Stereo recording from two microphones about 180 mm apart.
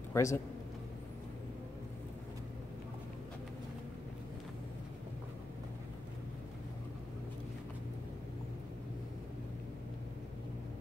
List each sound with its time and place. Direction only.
0.1 s a man's voice: 15° left (ahead or behind)